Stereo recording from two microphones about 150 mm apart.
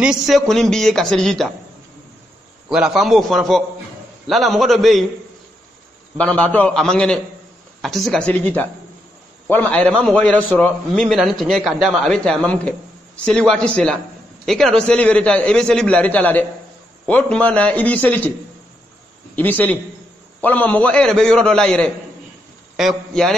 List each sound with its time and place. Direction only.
0.0 s a man's voice: 5° right (ahead or behind)
2.7 s a man's voice: 5° right (ahead or behind)
6.1 s a man's voice: 10° left (ahead or behind)
19.3 s a man's voice: 10° left (ahead or behind)